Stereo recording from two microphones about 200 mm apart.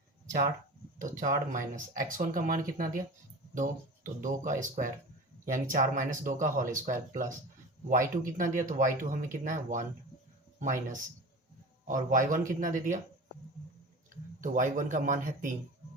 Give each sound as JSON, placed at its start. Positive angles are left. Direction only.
{"t": 0.3, "sound": "speech", "side_deg": -40}
{"t": 14.1, "sound": "speech", "side_deg": -40}